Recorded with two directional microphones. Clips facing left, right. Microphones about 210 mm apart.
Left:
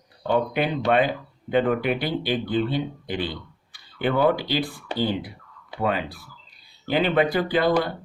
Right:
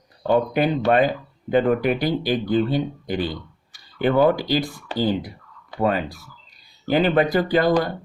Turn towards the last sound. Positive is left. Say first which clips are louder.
# right 3 dB
turn(degrees=-45)  # may be behind; listen again after turning